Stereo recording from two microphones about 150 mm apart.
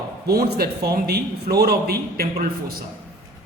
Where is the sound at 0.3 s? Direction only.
90° right.